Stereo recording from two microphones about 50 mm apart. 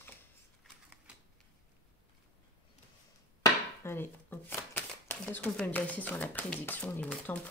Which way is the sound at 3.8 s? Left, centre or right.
Left.